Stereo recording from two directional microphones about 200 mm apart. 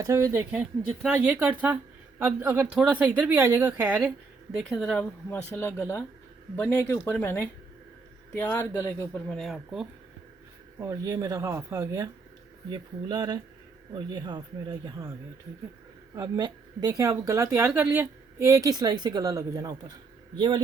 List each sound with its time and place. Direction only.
0.0 s speech: 15° right (ahead or behind)
10.8 s speech: 15° right (ahead or behind)
16.1 s speech: 15° right (ahead or behind)